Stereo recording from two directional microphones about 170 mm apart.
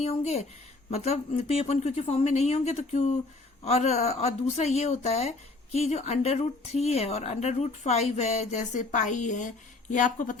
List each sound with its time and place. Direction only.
0.0 s speech: 40° left (ahead or behind)